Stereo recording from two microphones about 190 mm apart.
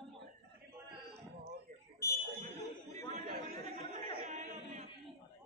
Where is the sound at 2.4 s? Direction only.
40° right (ahead or behind).